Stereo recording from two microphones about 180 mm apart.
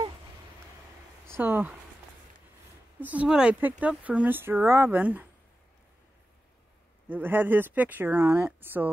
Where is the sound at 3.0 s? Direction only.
10° right (ahead or behind).